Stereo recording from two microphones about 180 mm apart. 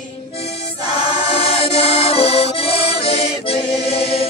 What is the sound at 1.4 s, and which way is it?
Accordion, 30° left (ahead or behind).